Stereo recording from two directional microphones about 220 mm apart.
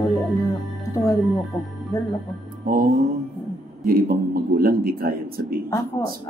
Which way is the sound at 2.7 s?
40° right (ahead or behind).